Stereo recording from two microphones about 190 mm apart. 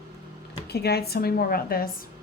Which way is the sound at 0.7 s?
60° left (ahead or behind).